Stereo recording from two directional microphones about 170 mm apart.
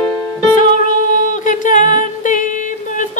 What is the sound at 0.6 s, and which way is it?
Music, 50° left (ahead or behind).